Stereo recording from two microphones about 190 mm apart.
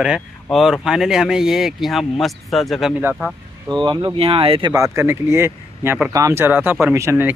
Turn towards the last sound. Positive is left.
turn(degrees=-15)  # may be behind; listen again after turning